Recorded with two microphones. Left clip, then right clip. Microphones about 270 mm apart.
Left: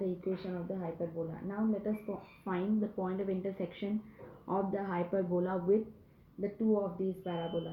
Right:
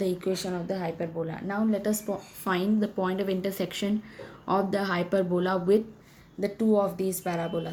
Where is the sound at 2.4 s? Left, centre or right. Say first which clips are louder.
Right 8 dB; right.